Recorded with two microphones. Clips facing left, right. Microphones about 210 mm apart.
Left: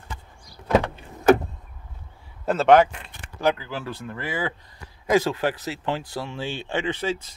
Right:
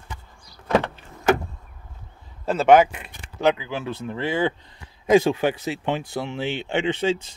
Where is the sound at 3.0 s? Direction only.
20° right (ahead or behind).